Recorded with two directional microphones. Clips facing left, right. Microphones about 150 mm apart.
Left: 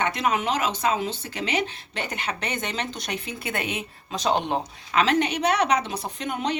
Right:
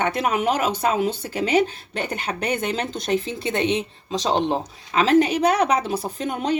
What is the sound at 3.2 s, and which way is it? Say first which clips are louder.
Speech: right 7 dB; 25° right (ahead or behind).